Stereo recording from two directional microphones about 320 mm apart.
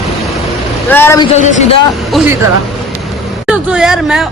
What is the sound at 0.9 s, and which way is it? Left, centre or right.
Speech, centre.